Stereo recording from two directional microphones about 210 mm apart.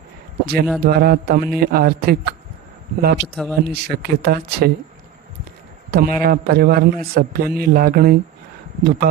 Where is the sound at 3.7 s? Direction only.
50° right (ahead or behind).